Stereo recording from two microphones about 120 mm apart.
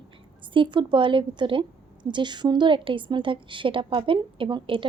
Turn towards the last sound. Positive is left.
turn(degrees=-45)  # may be behind; listen again after turning